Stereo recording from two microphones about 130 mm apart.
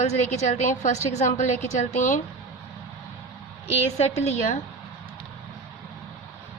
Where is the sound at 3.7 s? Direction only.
55° left (ahead or behind).